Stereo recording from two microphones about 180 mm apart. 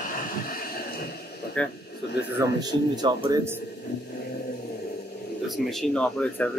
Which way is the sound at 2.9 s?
25° right (ahead or behind).